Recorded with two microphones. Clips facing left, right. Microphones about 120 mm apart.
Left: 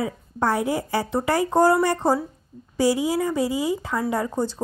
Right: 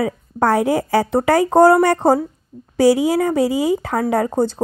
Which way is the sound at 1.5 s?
70° right (ahead or behind).